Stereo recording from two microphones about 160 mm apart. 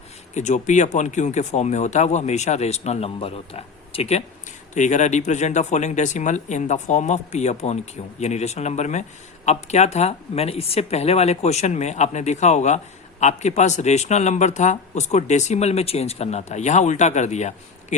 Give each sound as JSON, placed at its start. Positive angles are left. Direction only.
{"t": 0.3, "sound": "speech", "side_deg": 50}